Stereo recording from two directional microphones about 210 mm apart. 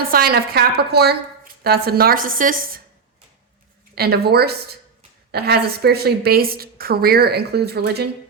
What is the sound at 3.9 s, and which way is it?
A woman's voice, 50° right (ahead or behind).